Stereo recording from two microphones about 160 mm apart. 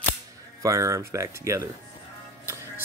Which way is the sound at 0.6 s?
20° right (ahead or behind).